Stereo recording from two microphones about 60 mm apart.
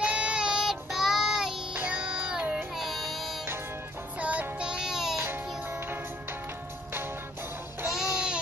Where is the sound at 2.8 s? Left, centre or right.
Centre.